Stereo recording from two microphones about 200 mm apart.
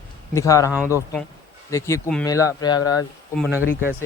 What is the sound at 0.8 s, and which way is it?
Speech, 10° right (ahead or behind).